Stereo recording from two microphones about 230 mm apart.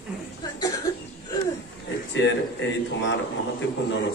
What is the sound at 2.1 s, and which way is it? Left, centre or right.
Speech, left.